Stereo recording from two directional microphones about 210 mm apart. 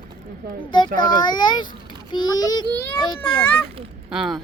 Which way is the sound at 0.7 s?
20° left (ahead or behind).